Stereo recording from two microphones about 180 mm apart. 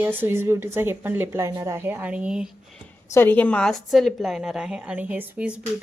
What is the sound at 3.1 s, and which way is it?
A woman's voice, 10° left (ahead or behind).